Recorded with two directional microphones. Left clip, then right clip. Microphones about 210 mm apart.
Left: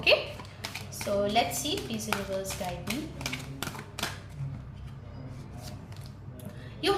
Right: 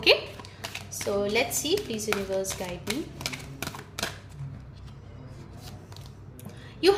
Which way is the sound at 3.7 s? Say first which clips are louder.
Right 3 dB; 35° right (ahead or behind).